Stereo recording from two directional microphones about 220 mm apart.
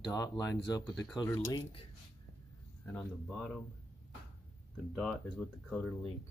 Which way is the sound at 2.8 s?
5° left (ahead or behind).